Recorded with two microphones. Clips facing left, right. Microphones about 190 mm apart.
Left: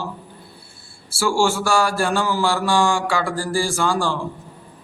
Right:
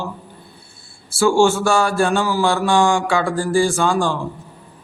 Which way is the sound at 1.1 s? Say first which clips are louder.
Right 5 dB; 20° right (ahead or behind).